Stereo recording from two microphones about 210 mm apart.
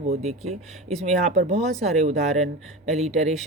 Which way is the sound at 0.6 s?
Centre (ahead or behind).